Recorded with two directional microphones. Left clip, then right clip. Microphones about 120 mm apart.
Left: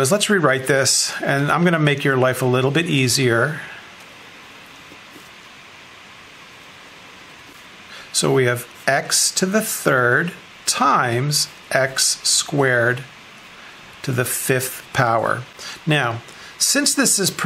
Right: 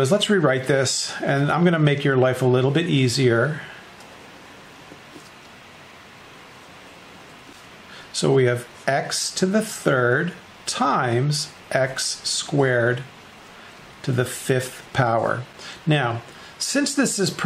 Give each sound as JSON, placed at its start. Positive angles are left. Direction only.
{"t": 0.0, "sound": "speech", "side_deg": 25}
{"t": 8.1, "sound": "speech", "side_deg": 25}
{"t": 14.0, "sound": "speech", "side_deg": 25}